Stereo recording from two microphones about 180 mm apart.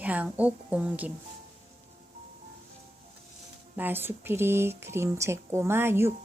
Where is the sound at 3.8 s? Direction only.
10° right (ahead or behind).